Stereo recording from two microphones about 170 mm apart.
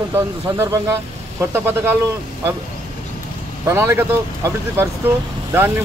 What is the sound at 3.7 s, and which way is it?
Speech, 15° right (ahead or behind).